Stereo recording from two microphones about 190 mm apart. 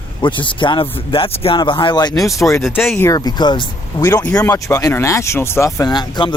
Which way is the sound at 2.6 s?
Centre (ahead or behind).